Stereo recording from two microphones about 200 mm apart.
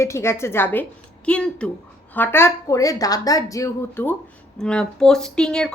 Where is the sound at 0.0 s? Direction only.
15° left (ahead or behind).